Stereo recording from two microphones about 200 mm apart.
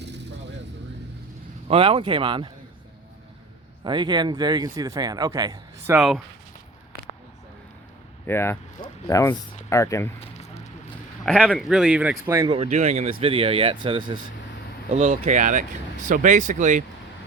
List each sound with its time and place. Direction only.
0.0 s vehicle: 60° right (ahead or behind)
1.6 s speech: 30° right (ahead or behind)
3.8 s speech: 20° right (ahead or behind); by 6.2 s 5° right (ahead or behind)
8.3 s speech: 10° left (ahead or behind)
10.2 s a sound: 30° left (ahead or behind)
11.3 s speech: 5° left (ahead or behind); by 12.5 s 15° right (ahead or behind)
12.5 s speech: 35° right (ahead or behind)
14.8 s speech: 40° right (ahead or behind)